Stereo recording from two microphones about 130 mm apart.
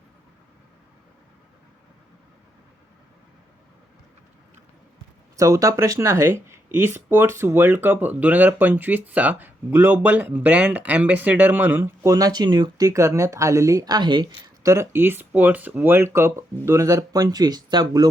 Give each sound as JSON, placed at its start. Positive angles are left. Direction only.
{"t": 5.4, "sound": "speech", "side_deg": -25}
{"t": 14.6, "sound": "speech", "side_deg": -25}